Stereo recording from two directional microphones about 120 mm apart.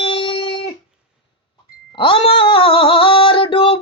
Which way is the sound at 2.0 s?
45° left (ahead or behind).